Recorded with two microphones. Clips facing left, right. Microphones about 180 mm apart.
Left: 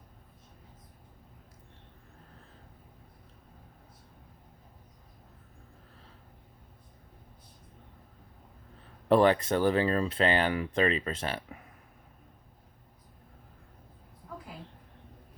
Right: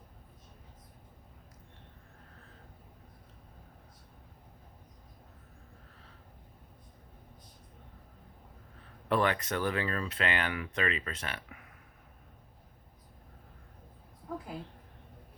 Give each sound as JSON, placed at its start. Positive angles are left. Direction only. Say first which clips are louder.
{"t": 9.0, "sound": "speech", "louder": "left 7 dB", "side_deg": 30}